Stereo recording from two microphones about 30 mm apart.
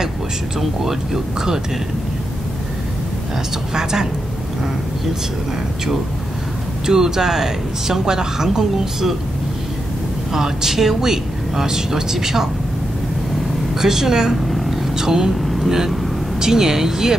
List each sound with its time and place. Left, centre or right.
1.1 s a woman's voice: centre
3.7 s a woman's voice: centre
6.9 s a woman's voice: centre
10.3 s a woman's voice: centre
13.7 s a woman's voice: centre
15.4 s vehicle: centre
16.3 s a woman's voice: centre